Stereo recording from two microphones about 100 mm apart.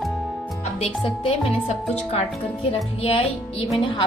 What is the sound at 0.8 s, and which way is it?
Speech, 80° left.